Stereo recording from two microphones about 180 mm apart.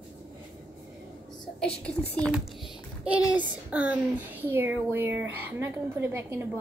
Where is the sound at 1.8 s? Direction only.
5° left (ahead or behind).